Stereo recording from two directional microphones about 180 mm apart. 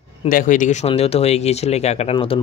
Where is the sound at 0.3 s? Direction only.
50° left (ahead or behind).